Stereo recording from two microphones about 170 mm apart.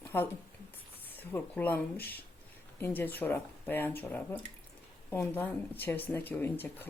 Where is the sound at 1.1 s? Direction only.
10° left (ahead or behind).